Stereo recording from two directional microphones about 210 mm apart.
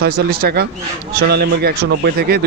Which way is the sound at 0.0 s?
45° right (ahead or behind).